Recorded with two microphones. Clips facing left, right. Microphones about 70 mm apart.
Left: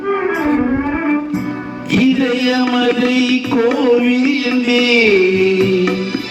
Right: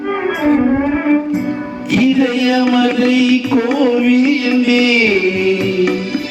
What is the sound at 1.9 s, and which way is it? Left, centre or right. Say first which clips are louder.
Music: right 1 dB; centre.